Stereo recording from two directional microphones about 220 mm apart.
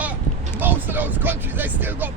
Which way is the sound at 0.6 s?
10° right (ahead or behind).